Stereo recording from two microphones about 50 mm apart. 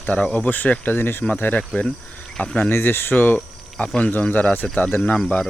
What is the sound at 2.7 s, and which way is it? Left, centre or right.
Speech, left.